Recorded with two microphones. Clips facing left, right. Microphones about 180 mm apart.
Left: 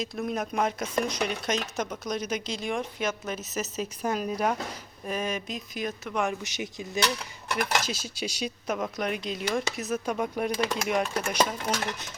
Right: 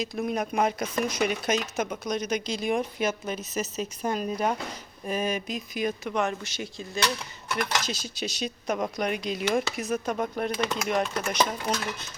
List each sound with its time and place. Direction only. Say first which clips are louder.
0.0 s speech: right 2 dB; centre (ahead or behind)
3.3 s speech: right 1 dB; 5° left (ahead or behind)
6.2 s speech: even; 15° left (ahead or behind)